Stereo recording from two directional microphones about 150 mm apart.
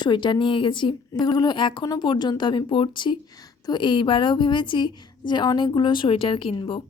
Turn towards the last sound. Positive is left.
turn(degrees=35)  # may be behind; listen again after turning